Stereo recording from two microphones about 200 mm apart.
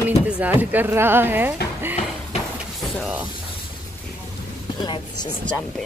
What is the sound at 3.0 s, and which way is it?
Speech, 5° right (ahead or behind).